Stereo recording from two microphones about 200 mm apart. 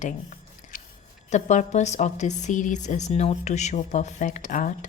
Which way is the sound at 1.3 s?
35° left (ahead or behind).